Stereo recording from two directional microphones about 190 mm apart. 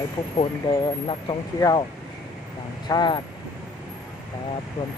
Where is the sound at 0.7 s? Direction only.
25° left (ahead or behind).